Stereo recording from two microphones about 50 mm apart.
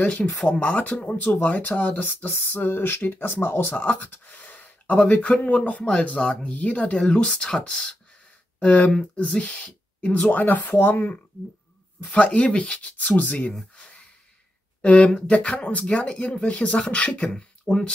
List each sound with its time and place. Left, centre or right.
0.0 s speech: left
12.0 s speech: left
13.7 s a sound: left
14.8 s speech: left